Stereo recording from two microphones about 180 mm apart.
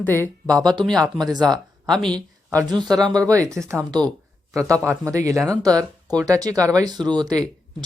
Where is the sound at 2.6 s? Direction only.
25° right (ahead or behind).